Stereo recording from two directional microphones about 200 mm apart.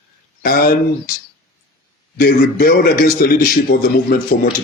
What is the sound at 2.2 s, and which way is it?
A man's voice, 45° left (ahead or behind).